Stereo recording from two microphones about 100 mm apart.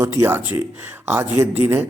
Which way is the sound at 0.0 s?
30° right (ahead or behind).